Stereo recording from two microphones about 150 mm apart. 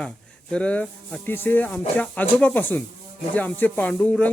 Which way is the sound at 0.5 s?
10° left (ahead or behind).